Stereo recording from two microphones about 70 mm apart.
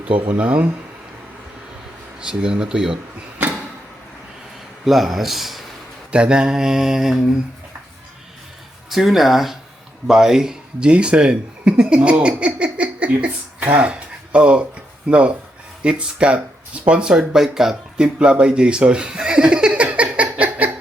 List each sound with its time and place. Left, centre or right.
0.0 s speech: right
2.2 s mantra: centre
4.9 s speech: centre
6.1 s mantra: centre
8.9 s speech: centre
15.1 s mantra: centre
16.8 s speech: centre